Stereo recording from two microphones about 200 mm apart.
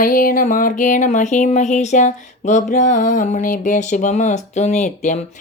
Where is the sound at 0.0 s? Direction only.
45° left (ahead or behind).